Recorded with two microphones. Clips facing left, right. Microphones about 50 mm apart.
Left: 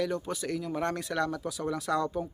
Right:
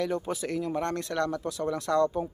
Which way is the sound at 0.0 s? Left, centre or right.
Centre.